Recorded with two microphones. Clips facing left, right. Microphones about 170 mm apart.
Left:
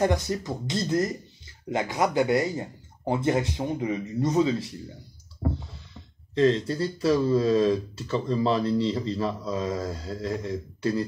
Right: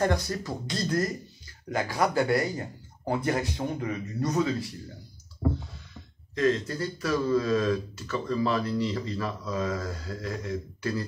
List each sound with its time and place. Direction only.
0.0 s speech: 20° left (ahead or behind)
6.3 s speech: 30° left (ahead or behind)